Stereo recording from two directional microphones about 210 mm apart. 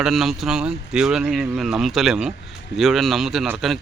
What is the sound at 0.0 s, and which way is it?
Speech, centre (ahead or behind).